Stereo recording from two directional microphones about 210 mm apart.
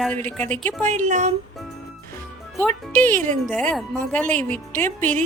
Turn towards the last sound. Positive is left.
turn(degrees=10)  # may be behind; listen again after turning